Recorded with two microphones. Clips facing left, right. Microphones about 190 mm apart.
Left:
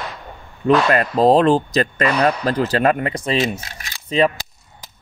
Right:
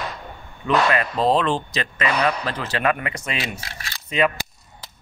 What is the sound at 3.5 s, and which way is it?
Speech, 20° left (ahead or behind).